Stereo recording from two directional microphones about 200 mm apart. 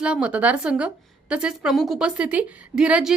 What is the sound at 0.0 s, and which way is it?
A woman's voice, 5° right (ahead or behind).